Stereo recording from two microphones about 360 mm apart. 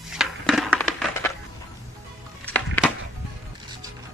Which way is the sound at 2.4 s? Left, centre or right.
Centre.